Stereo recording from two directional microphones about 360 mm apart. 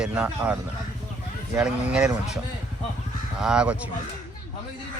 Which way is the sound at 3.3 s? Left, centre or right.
Centre.